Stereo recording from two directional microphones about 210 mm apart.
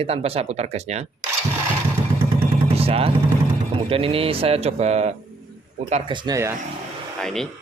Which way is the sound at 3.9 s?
25° right (ahead or behind).